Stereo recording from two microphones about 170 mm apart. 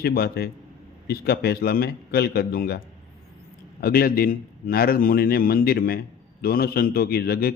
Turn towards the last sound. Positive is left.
turn(degrees=65)  # may be behind; listen again after turning